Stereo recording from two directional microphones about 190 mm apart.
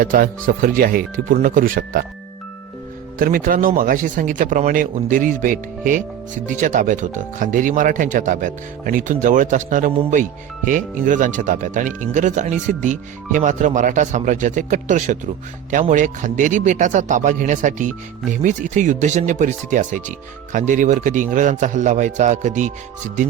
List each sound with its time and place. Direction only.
0.0 s speech: 45° right (ahead or behind)
3.2 s speech: 45° right (ahead or behind)